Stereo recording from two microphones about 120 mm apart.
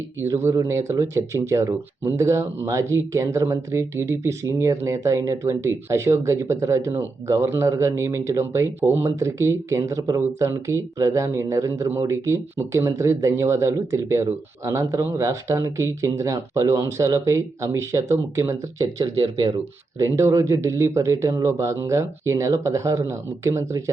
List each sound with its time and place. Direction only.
0.2 s speech: 25° right (ahead or behind)